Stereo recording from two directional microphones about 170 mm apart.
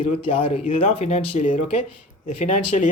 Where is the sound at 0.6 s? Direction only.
45° left (ahead or behind).